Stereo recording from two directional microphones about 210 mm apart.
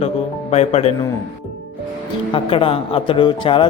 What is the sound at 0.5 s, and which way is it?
Speech, 30° left (ahead or behind).